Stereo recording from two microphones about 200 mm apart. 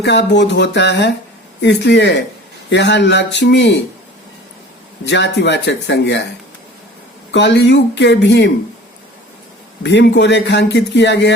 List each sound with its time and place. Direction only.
0.0 s speech: 60° left (ahead or behind)
5.0 s speech: 60° left (ahead or behind)
7.3 s speech: 60° left (ahead or behind)
9.8 s speech: 60° left (ahead or behind)